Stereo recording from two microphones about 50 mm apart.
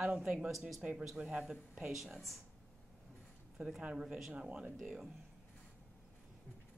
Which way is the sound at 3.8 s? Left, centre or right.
Right.